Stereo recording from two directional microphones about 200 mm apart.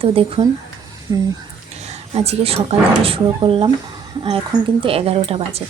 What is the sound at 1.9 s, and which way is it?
Speech, 30° right (ahead or behind).